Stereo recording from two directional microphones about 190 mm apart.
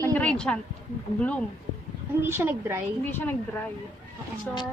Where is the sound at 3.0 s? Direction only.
10° left (ahead or behind).